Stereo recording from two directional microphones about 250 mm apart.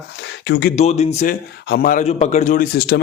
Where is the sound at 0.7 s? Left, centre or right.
Left.